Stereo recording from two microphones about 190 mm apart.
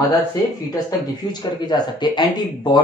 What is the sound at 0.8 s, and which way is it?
Speech, 20° left (ahead or behind).